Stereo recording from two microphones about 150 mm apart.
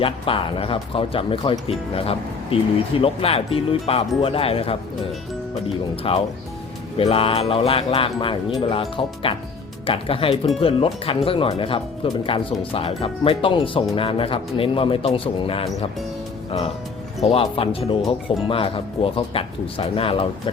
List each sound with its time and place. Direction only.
0.0 s speech: 35° left (ahead or behind)
6.0 s speech: 40° left (ahead or behind)